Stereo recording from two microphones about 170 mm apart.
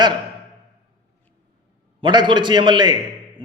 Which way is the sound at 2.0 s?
30° right (ahead or behind).